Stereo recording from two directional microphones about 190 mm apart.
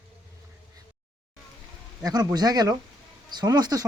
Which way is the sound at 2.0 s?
20° right (ahead or behind).